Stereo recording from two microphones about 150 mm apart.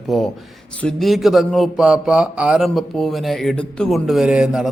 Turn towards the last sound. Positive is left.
turn(degrees=-5)  # may be behind; listen again after turning